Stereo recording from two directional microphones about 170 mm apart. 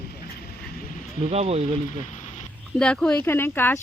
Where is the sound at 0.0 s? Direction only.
65° left (ahead or behind).